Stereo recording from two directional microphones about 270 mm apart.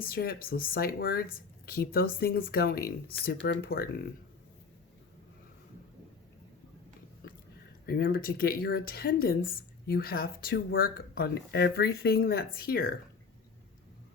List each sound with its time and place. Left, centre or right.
0.0 s speech: left
7.9 s speech: left